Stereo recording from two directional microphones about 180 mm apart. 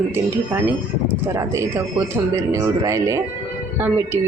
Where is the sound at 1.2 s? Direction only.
15° right (ahead or behind).